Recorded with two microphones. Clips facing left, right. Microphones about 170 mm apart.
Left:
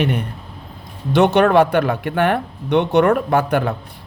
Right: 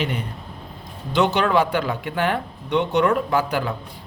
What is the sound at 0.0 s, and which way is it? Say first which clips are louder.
Speech: left 6 dB; 60° left (ahead or behind).